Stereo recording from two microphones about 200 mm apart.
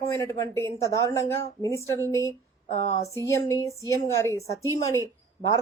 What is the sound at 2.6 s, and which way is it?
Speech, 35° left (ahead or behind).